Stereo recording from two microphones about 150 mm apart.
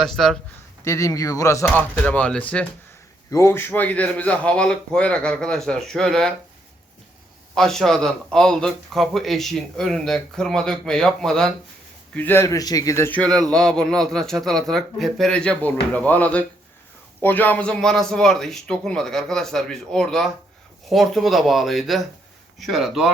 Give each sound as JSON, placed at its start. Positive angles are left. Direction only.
{"t": 0.0, "sound": "a man's voice", "side_deg": 0}
{"t": 0.9, "sound": "speech", "side_deg": 20}
{"t": 1.7, "sound": "a man's voice", "side_deg": 10}
{"t": 3.2, "sound": "a man's voice", "side_deg": 20}
{"t": 7.5, "sound": "a man's voice", "side_deg": 5}